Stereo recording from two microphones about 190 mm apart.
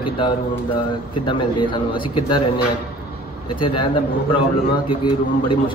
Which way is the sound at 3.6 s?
25° left (ahead or behind).